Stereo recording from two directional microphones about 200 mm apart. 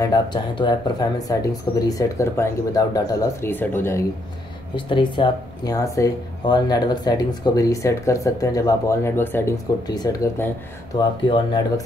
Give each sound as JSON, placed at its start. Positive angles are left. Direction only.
{"t": 0.0, "sound": "speech", "side_deg": 20}
{"t": 4.7, "sound": "speech", "side_deg": 25}